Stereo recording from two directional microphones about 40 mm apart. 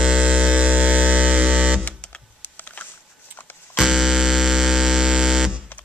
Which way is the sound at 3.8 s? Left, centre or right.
Centre.